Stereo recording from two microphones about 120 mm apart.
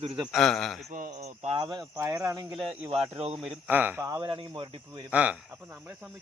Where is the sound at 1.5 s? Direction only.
45° right (ahead or behind).